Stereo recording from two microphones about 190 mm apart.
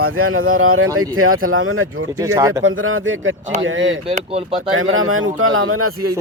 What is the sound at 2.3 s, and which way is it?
Speech, 20° right (ahead or behind).